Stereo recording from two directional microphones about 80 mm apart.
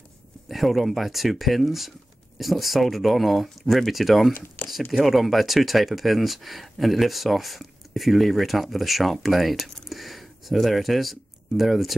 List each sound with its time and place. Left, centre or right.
0.5 s speech: centre
4.6 s a sound: left
4.9 s speech: centre